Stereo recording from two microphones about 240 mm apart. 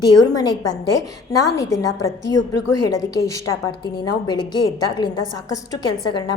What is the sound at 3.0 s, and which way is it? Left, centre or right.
A woman's voice, centre.